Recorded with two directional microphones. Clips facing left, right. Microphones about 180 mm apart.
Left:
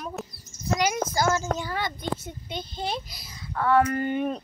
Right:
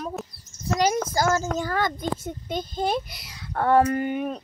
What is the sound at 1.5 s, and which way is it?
A child's voice, 45° right (ahead or behind).